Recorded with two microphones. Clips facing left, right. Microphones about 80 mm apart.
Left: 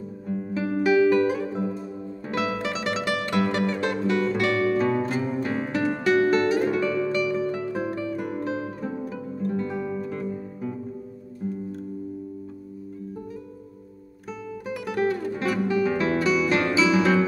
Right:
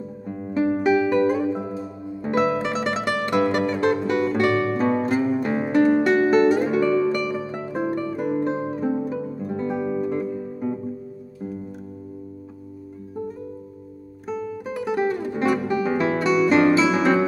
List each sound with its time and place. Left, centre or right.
0.3 s music: centre
0.9 s music: centre
14.2 s music: centre
14.9 s guitar: centre
15.7 s music: centre